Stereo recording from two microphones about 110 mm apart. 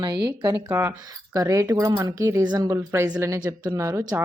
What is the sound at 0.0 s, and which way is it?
Speech, 40° right (ahead or behind).